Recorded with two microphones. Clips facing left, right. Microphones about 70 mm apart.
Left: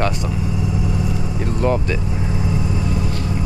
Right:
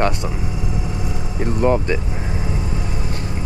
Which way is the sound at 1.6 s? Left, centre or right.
Centre.